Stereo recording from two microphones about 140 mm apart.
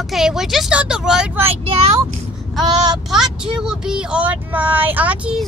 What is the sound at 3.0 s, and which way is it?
Speech, 5° right (ahead or behind).